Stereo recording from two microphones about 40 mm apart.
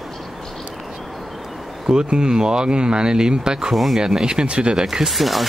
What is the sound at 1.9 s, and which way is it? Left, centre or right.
Speech, right.